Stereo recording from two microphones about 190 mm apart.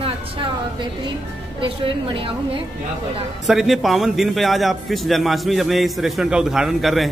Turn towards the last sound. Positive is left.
turn(degrees=0)  # may be behind; listen again after turning